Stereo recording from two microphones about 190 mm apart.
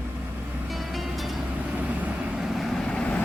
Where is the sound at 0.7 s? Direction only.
Centre (ahead or behind).